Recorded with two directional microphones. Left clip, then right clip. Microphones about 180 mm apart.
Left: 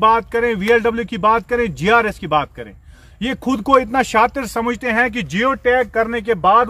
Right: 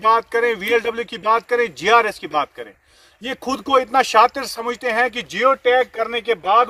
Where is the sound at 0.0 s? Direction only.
5° left (ahead or behind).